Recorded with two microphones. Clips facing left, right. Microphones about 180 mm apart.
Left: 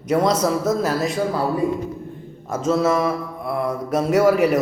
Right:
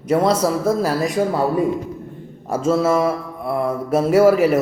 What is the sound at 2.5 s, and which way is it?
Speech, 30° right (ahead or behind).